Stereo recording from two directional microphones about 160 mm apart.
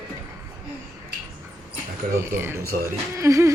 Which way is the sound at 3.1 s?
20° right (ahead or behind).